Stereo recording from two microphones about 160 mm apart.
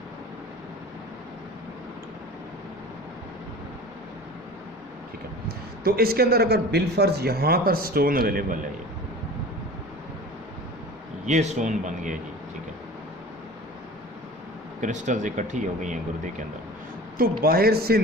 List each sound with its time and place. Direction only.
5.8 s a man's voice: 70° right (ahead or behind)
11.3 s speech: 50° right (ahead or behind)
14.8 s speech: 50° right (ahead or behind)
17.4 s a man's voice: 70° right (ahead or behind)